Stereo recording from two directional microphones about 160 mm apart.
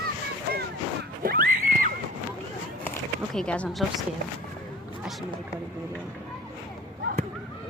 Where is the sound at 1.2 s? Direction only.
65° right (ahead or behind).